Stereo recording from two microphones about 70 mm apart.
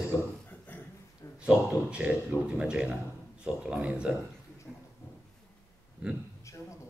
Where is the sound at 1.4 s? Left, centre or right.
Centre.